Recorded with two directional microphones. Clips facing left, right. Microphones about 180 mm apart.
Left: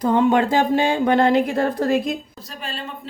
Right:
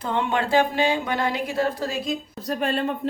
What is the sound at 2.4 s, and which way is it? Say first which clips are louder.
Speech: right 9 dB; 55° right (ahead or behind).